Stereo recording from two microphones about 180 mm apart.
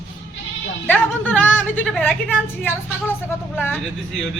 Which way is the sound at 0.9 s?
10° left (ahead or behind).